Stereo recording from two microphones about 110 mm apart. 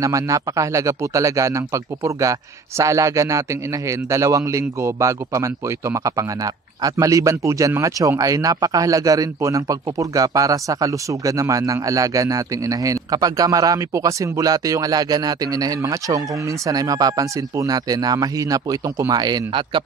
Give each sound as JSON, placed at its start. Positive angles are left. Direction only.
{"t": 0.0, "sound": "a man's voice", "side_deg": -30}